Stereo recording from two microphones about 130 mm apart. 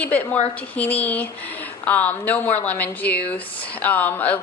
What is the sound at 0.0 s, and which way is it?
Speech, 10° left (ahead or behind).